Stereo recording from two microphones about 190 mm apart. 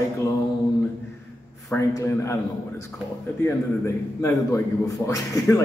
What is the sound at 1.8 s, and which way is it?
Speech, 15° left (ahead or behind).